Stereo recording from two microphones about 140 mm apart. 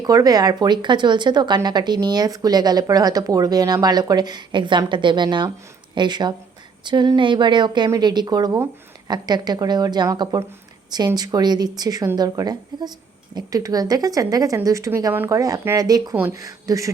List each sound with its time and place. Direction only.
0.0 s speech: 25° right (ahead or behind)